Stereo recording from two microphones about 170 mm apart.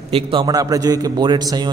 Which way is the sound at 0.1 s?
30° right (ahead or behind).